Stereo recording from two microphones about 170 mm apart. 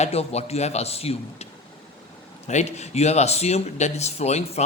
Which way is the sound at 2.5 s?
40° left (ahead or behind).